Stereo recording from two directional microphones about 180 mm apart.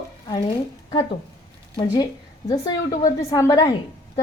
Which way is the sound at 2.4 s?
20° left (ahead or behind).